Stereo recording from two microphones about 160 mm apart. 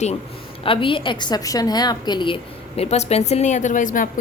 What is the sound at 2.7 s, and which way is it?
Speech, 40° left (ahead or behind).